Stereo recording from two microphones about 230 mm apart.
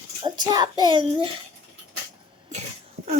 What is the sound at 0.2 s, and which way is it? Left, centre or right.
A child's voice, centre.